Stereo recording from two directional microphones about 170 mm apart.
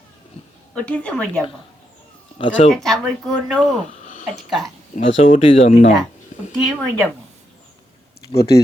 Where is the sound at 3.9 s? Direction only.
50° left (ahead or behind).